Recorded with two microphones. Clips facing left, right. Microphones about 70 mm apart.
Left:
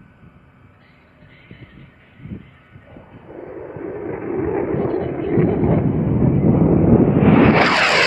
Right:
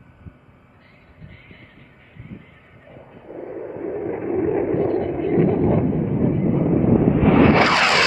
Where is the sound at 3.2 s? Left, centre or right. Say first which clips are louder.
Right 1 dB; centre; by 6.1 s left.